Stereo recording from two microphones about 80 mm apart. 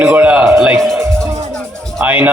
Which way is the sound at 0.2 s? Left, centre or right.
Centre.